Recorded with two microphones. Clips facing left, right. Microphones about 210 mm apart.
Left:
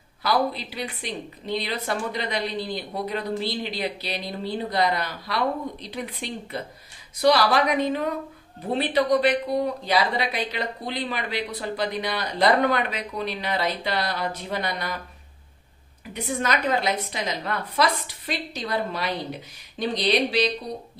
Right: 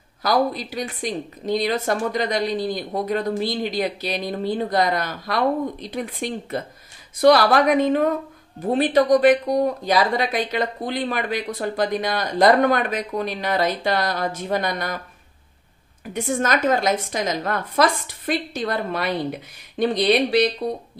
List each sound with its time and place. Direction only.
0.2 s a woman's voice: 45° right (ahead or behind)
16.1 s a woman's voice: 50° right (ahead or behind)